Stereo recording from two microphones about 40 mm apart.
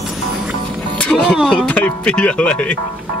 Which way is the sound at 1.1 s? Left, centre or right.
Centre.